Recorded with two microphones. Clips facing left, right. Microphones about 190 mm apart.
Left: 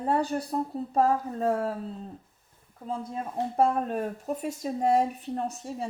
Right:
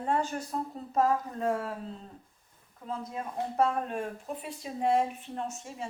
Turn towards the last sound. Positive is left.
turn(degrees=35)  # may be behind; listen again after turning